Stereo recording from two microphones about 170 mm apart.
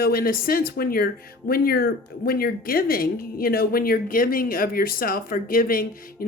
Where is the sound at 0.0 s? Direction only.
60° left (ahead or behind).